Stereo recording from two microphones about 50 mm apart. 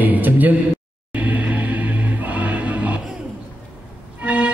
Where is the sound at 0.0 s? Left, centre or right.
Right.